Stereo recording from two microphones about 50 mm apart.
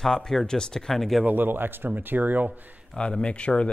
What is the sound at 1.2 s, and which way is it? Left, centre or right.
Speech, right.